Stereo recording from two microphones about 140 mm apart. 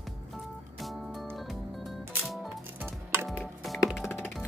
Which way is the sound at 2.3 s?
10° right (ahead or behind).